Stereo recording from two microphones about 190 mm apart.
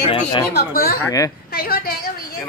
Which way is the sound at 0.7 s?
50° left (ahead or behind).